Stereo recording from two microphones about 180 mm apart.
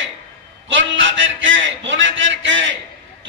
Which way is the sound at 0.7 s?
90° right.